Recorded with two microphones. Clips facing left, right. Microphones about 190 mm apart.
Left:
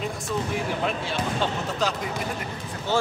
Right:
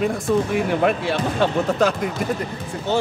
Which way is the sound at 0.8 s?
65° right (ahead or behind).